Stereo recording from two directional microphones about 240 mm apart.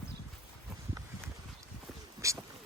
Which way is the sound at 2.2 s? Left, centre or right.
Centre.